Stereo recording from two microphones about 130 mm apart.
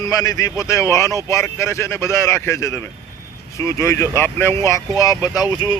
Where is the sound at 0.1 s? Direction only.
25° left (ahead or behind).